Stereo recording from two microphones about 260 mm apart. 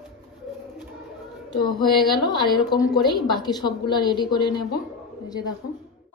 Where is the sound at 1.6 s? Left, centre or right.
Centre.